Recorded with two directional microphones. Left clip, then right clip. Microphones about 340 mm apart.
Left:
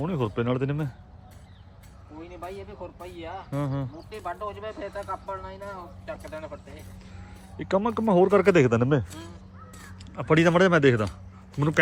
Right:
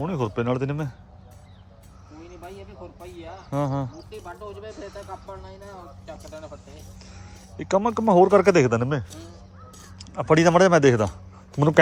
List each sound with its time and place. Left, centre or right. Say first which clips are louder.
0.0 s speech: right 2 dB; centre
2.4 s speech: left 4 dB; centre
4.2 s speech: left 6 dB; left
7.5 s speech: right 3 dB; centre